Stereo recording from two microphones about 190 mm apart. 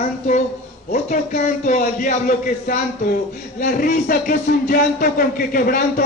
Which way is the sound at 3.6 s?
45° left (ahead or behind).